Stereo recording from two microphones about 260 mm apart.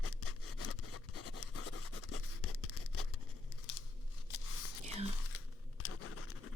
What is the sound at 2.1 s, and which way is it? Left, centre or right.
Scratch, left.